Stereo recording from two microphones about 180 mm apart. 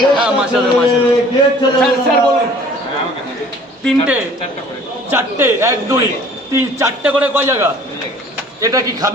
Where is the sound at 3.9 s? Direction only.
5° right (ahead or behind).